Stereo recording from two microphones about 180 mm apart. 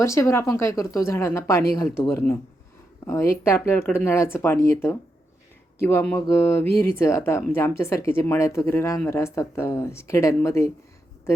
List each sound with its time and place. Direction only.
0.0 s speech: 15° left (ahead or behind)